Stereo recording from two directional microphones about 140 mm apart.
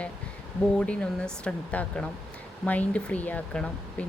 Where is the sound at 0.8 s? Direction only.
5° left (ahead or behind).